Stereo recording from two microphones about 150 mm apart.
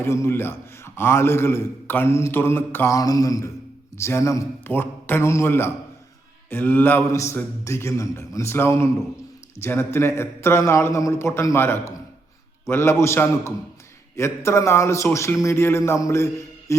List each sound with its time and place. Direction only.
0.0 s a man's voice: 20° left (ahead or behind)